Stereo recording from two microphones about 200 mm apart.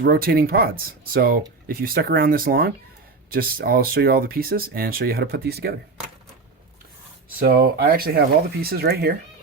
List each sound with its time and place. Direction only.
0.0 s speech: 50° right (ahead or behind)
7.3 s speech: 45° right (ahead or behind)